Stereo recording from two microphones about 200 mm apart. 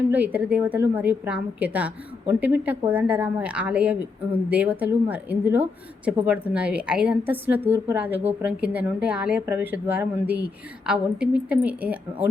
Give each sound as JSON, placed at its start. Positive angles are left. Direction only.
{"t": 0.1, "sound": "a woman's voice", "side_deg": -10}